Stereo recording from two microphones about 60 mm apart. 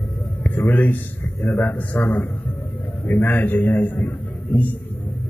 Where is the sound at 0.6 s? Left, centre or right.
Left.